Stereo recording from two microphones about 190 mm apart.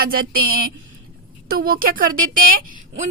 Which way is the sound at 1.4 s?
50° right (ahead or behind).